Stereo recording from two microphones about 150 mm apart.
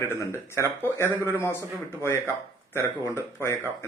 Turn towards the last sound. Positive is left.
turn(degrees=15)  # may be behind; listen again after turning